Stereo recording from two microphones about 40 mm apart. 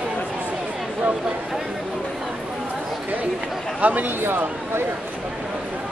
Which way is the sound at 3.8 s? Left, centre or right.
Right.